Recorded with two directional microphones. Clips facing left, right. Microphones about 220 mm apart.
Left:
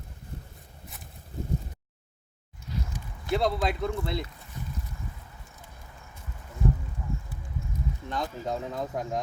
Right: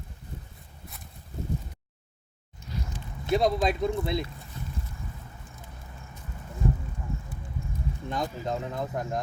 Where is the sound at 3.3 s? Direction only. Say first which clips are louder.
Right 2 dB; 15° right (ahead or behind).